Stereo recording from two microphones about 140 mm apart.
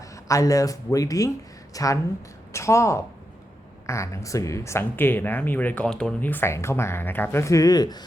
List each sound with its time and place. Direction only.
0.3 s a woman's voice: 25° left (ahead or behind)